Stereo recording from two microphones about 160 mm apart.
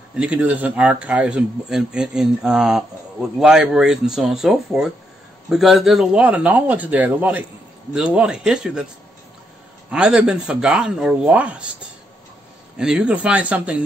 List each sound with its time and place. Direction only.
0.1 s speech: 10° right (ahead or behind)
9.8 s speech: 5° right (ahead or behind)
12.7 s speech: 5° right (ahead or behind)